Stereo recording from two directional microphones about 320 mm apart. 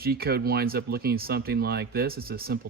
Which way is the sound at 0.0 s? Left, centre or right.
Right.